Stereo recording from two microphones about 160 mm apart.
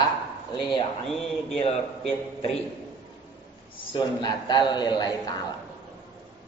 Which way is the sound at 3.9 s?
30° left (ahead or behind).